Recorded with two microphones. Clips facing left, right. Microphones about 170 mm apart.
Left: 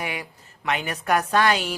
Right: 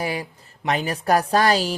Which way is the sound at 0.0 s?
35° right (ahead or behind).